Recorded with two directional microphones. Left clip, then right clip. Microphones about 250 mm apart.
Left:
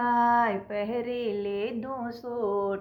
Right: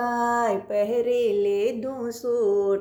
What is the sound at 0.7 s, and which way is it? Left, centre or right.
Speech, left.